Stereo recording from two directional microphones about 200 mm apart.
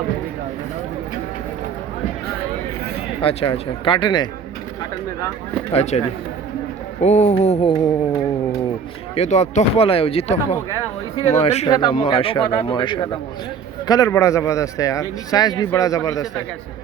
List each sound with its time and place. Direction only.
3.2 s speech: 25° left (ahead or behind)
5.7 s speech: 35° left (ahead or behind)
7.0 s speech: 35° left (ahead or behind)
9.1 s speech: 35° left (ahead or behind); by 16.2 s 15° left (ahead or behind)